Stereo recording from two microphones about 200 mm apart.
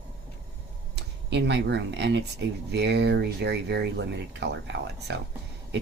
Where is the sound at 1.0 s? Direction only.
60° right (ahead or behind).